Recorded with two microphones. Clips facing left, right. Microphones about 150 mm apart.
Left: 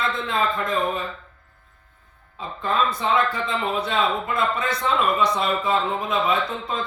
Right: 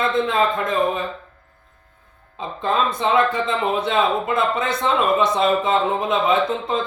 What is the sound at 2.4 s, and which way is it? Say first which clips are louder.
Speech: right 2 dB; 20° right (ahead or behind).